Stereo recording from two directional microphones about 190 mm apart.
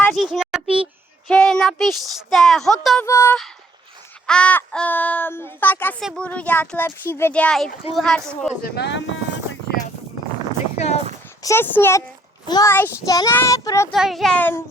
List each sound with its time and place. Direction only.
0.0 s a sound: centre (ahead or behind)
1.3 s speech: 5° left (ahead or behind)
3.1 s speech: 15° left (ahead or behind)
8.6 s speech: 60° left (ahead or behind)
11.4 s speech: 10° left (ahead or behind)
13.9 s speech: centre (ahead or behind)